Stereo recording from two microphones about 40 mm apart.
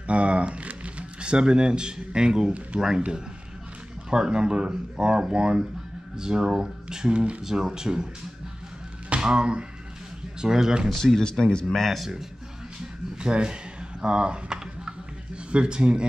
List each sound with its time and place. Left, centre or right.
0.1 s speech: right; by 2.9 s centre
4.1 s speech: right
7.4 s speech: centre
9.2 s speech: right
10.9 s speech: centre
13.2 s speech: right
14.0 s a sound: right
15.5 s speech: right